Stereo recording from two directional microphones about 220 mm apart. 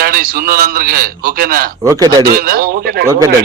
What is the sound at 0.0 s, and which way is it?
A man's voice, 45° right (ahead or behind).